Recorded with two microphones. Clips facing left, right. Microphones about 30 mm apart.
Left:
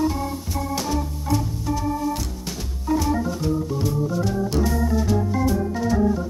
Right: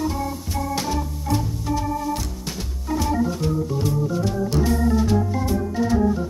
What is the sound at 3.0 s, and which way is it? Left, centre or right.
Organ, centre.